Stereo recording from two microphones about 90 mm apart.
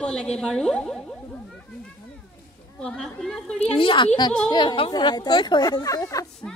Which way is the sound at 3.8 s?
70° left (ahead or behind).